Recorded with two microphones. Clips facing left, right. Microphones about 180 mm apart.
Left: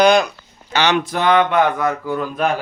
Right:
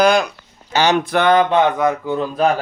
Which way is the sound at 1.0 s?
60° right (ahead or behind).